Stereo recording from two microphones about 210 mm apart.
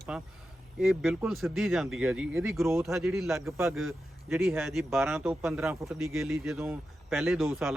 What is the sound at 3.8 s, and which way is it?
Speech, centre (ahead or behind).